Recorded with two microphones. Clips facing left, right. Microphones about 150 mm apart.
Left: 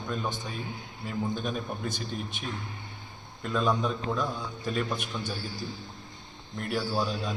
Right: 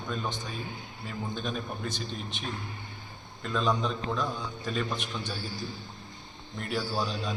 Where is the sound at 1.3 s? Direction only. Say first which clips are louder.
Left 2 dB; 10° left (ahead or behind).